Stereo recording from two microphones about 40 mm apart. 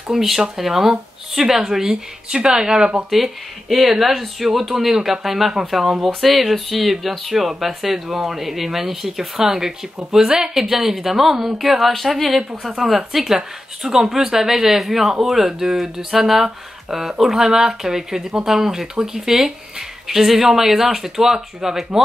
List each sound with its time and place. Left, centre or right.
0.1 s speech: centre
3.1 s speech: centre